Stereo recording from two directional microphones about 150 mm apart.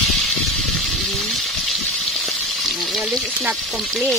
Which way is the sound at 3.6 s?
Centre (ahead or behind).